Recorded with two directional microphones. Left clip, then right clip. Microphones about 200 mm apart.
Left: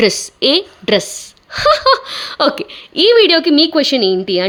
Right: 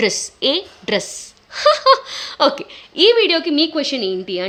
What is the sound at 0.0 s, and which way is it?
Speech, 25° left (ahead or behind).